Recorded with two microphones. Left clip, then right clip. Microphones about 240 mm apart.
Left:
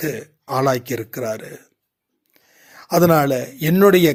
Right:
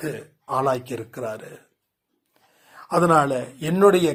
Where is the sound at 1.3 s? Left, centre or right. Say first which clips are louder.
Left 6 dB; left.